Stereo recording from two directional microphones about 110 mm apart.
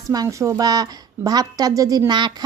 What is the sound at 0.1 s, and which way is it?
A woman's voice, 30° right (ahead or behind).